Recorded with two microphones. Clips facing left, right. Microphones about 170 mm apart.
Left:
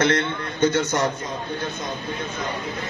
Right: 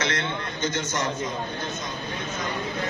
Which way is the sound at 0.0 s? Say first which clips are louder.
Left 7 dB; 55° left (ahead or behind).